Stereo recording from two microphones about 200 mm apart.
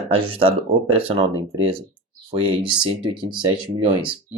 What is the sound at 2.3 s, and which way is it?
Speech, 25° right (ahead or behind).